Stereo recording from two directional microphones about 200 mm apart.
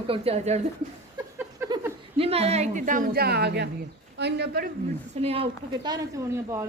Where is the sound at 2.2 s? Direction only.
30° right (ahead or behind); by 4.7 s 55° right (ahead or behind).